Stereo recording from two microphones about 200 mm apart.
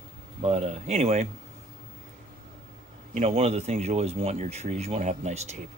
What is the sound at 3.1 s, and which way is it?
Speech, 35° right (ahead or behind).